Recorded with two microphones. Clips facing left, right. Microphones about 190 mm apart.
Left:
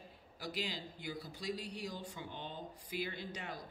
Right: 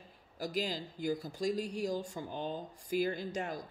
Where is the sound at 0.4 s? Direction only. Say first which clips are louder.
Right 6 dB; 45° right (ahead or behind).